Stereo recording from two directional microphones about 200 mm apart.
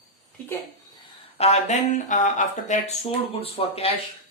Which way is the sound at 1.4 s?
35° left (ahead or behind).